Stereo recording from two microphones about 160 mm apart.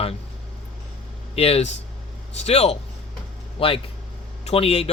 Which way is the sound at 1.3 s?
40° left (ahead or behind).